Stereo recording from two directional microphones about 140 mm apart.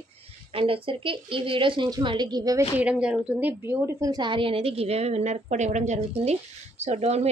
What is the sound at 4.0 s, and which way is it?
A woman's voice, 30° right (ahead or behind).